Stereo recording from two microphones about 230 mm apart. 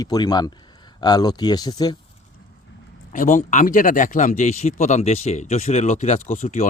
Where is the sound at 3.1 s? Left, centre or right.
Left.